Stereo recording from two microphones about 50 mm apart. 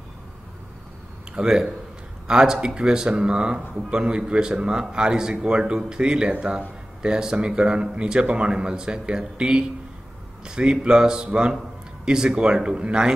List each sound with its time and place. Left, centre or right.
1.3 s speech: centre